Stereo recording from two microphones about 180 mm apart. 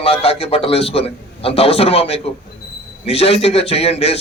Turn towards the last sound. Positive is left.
turn(degrees=35)  # may be behind; listen again after turning